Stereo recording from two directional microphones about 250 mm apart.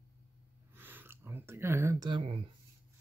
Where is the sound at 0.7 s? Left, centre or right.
Centre.